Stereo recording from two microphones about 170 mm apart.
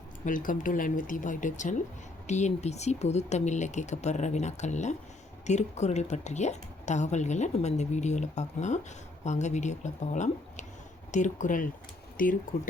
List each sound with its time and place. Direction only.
0.3 s speech: 50° left (ahead or behind)